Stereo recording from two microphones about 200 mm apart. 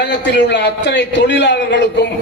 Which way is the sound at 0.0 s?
60° left (ahead or behind).